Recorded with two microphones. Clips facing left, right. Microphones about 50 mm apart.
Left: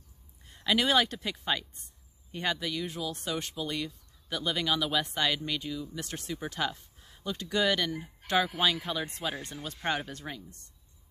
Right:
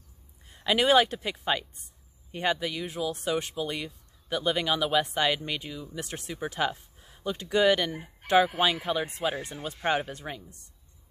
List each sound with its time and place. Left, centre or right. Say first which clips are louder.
0.5 s speech: right 4 dB; centre